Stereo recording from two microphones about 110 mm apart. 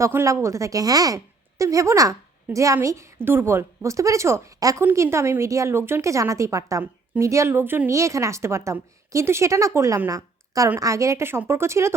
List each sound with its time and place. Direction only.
0.0 s a woman's voice: 25° right (ahead or behind)
10.1 s a sound: 30° right (ahead or behind)
10.8 s a woman's voice: 30° right (ahead or behind)